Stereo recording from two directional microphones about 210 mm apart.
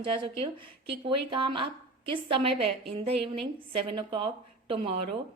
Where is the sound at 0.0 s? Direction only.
25° right (ahead or behind).